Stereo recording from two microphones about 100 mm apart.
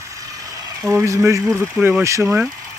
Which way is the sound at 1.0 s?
30° right (ahead or behind).